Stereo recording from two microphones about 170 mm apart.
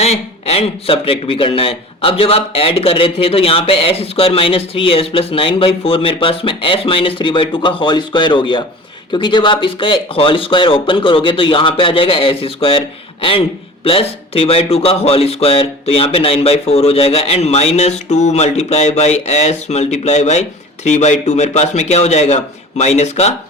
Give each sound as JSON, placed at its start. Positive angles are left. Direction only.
{"t": 0.0, "sound": "speech", "side_deg": 40}
{"t": 13.8, "sound": "speech", "side_deg": 35}